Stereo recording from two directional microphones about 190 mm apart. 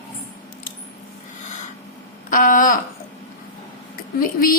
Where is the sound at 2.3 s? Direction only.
45° left (ahead or behind).